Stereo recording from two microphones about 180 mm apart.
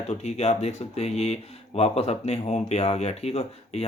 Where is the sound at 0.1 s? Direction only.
35° left (ahead or behind).